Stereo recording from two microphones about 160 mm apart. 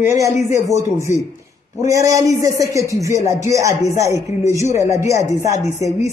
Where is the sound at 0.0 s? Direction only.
20° right (ahead or behind).